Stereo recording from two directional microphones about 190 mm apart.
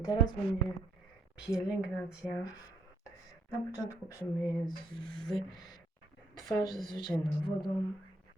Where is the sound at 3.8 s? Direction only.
20° left (ahead or behind).